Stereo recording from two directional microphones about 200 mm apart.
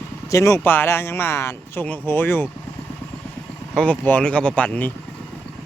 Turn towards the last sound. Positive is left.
turn(degrees=5)  # may be behind; listen again after turning